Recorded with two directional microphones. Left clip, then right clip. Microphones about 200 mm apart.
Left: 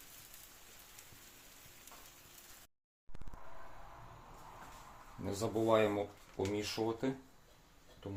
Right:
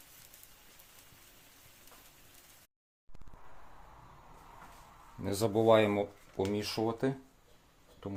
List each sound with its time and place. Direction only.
5.4 s speech: 55° right (ahead or behind)